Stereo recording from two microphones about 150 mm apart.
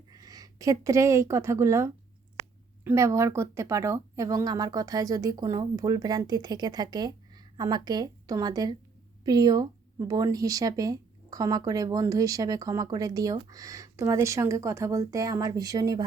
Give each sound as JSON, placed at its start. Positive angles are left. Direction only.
{"t": 0.1, "sound": "a woman's voice", "side_deg": -25}